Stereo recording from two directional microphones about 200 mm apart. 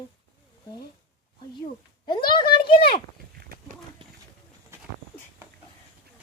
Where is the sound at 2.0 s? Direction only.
25° left (ahead or behind).